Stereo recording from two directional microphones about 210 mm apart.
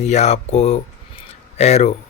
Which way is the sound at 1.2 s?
30° left (ahead or behind).